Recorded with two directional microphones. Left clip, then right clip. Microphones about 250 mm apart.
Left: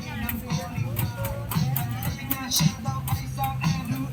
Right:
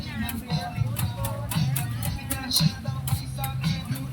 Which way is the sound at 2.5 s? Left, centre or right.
Centre.